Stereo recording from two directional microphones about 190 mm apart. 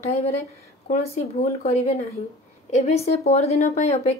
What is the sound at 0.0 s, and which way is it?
Speech, 35° left (ahead or behind).